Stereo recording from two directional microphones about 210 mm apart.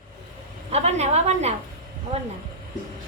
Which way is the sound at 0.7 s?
30° right (ahead or behind).